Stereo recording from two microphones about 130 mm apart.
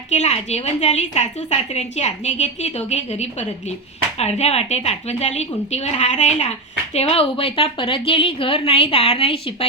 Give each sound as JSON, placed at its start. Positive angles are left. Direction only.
{"t": 0.1, "sound": "a woman's voice", "side_deg": 60}
{"t": 6.9, "sound": "a woman's voice", "side_deg": 50}